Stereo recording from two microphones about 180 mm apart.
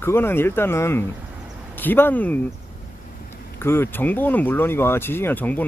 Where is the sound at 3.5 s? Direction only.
15° left (ahead or behind).